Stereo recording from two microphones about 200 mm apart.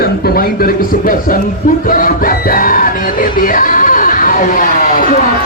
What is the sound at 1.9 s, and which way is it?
Music, 45° left (ahead or behind).